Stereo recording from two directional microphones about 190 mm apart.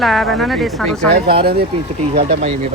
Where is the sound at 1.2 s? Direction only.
55° right (ahead or behind).